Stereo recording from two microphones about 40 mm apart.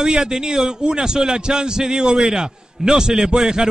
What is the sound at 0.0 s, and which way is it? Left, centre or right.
A man's voice, centre.